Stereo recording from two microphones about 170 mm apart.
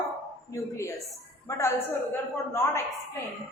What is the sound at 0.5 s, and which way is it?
A woman's voice, 20° left (ahead or behind).